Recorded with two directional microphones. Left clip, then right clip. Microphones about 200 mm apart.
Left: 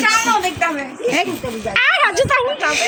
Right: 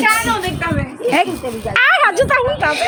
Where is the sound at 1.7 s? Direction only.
10° right (ahead or behind).